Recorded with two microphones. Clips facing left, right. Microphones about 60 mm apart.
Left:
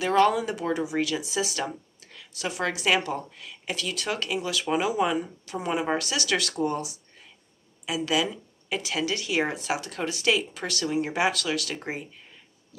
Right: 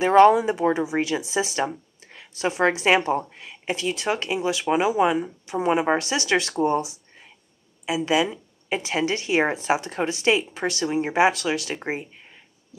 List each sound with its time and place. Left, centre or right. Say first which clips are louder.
0.0 s speech: right 7 dB; right